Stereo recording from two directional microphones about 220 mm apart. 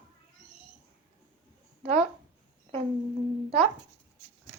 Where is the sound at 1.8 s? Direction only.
30° right (ahead or behind).